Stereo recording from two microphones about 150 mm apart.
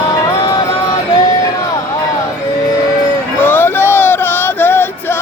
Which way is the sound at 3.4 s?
15° left (ahead or behind).